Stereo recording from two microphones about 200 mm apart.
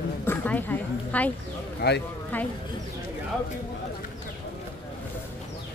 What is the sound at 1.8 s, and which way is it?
Speech, 55° left (ahead or behind).